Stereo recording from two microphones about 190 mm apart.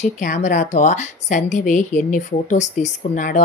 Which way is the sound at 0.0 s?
40° left (ahead or behind).